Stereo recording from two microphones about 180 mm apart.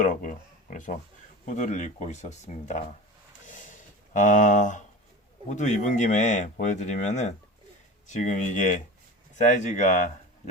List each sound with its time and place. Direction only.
0.0 s speech: 45° left (ahead or behind)
3.4 s a sound: 45° left (ahead or behind)
5.5 s speech: 40° left (ahead or behind)